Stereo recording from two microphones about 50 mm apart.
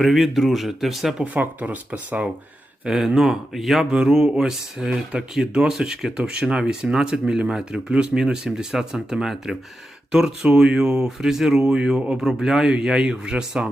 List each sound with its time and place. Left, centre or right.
0.0 s speech: centre
1.2 s speech: right
2.8 s speech: centre
3.9 s speech: centre